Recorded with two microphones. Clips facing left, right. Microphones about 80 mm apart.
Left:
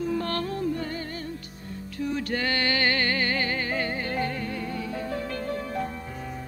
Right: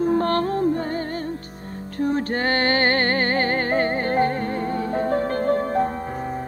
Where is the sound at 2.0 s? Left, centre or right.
Right.